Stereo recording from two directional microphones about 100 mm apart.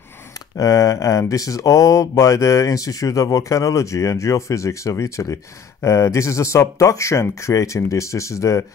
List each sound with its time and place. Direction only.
0.6 s speech: 35° left (ahead or behind)